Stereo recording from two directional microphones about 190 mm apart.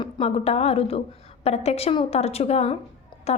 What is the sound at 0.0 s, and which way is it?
A woman's voice, 30° left (ahead or behind).